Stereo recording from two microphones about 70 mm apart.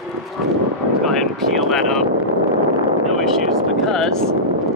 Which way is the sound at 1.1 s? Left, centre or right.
Centre.